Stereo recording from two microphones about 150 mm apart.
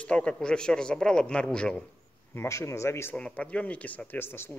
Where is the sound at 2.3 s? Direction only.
15° left (ahead or behind).